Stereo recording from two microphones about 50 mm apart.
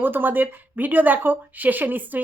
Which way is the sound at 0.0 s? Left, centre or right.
Right.